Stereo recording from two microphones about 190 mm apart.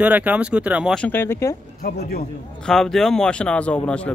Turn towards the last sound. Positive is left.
turn(degrees=5)  # may be behind; listen again after turning